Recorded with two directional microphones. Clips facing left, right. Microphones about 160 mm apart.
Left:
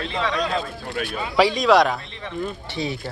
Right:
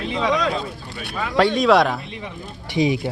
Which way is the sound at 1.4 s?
Centre (ahead or behind).